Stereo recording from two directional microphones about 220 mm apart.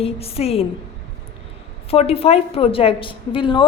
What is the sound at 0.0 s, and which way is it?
Speech, 25° left (ahead or behind).